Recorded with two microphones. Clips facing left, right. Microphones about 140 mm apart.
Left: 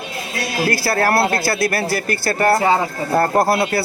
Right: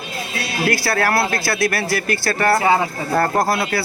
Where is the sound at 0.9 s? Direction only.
30° left (ahead or behind).